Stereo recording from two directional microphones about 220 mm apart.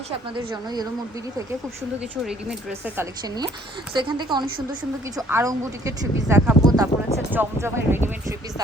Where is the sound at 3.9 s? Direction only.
20° right (ahead or behind).